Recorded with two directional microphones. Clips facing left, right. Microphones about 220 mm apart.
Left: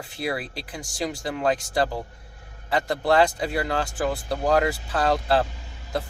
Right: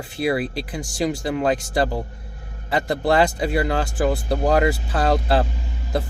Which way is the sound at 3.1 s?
10° right (ahead or behind).